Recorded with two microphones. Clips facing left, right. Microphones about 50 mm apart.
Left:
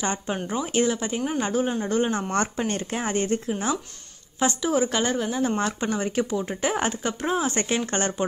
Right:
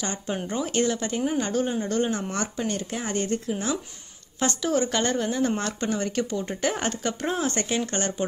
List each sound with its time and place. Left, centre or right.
0.0 s speech: left
0.5 s speech: centre
2.3 s speech: left
4.4 s speech: centre
7.5 s speech: left